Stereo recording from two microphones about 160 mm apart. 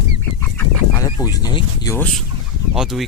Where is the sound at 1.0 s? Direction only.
20° left (ahead or behind).